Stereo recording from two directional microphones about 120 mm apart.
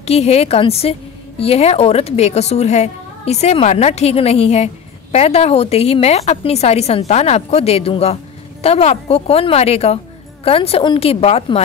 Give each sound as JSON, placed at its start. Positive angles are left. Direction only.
{"t": 0.0, "sound": "a woman's voice", "side_deg": 60}